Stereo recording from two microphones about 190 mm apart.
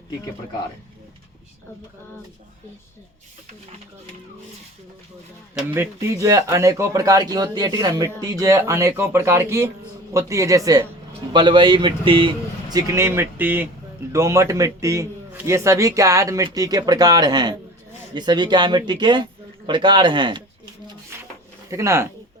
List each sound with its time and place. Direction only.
5.7 s a man's voice: 15° right (ahead or behind)
21.7 s a man's voice: 15° right (ahead or behind)